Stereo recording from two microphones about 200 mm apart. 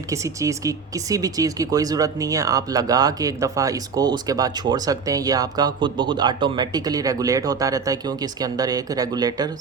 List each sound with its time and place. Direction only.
0.1 s speech: 15° right (ahead or behind)